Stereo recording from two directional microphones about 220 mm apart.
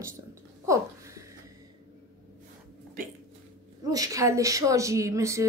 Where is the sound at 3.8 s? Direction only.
15° right (ahead or behind).